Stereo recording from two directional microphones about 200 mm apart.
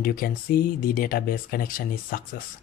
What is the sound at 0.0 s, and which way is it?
Speech, 45° left (ahead or behind).